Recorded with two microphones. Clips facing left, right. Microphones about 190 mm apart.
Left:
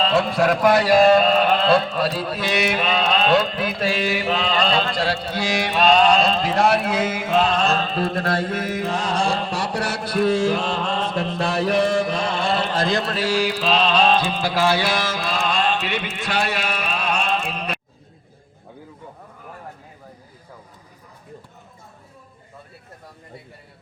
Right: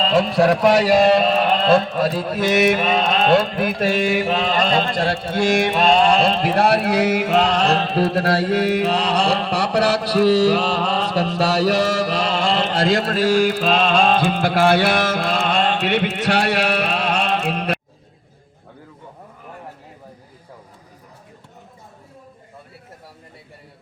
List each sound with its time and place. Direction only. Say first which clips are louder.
0.9 s mantra: even; 15° right (ahead or behind)
1.6 s mantra: right 2 dB; 45° right (ahead or behind); by 12.7 s 90° right
13.0 s mantra: right 5 dB; 45° right (ahead or behind); by 17.7 s 65° right (ahead or behind)